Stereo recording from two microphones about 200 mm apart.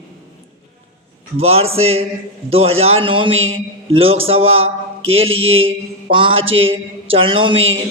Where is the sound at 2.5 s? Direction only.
30° right (ahead or behind).